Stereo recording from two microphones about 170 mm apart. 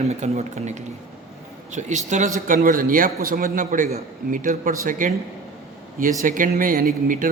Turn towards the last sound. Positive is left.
turn(degrees=-55)  # may be behind; listen again after turning